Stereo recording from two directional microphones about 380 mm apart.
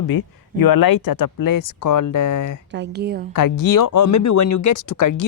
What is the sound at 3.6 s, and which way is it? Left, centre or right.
Speech, left.